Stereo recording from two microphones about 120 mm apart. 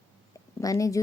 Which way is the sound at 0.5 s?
30° left (ahead or behind).